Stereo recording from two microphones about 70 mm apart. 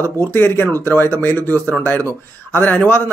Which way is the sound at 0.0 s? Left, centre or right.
Left.